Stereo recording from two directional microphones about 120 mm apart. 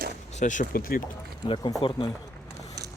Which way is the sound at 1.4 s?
45° left (ahead or behind).